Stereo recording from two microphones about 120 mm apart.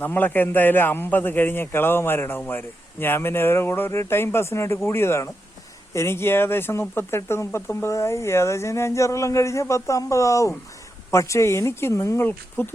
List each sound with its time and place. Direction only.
0.0 s a man's voice: 15° left (ahead or behind)